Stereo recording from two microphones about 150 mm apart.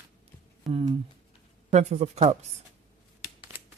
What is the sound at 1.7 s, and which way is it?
Speech, 50° right (ahead or behind).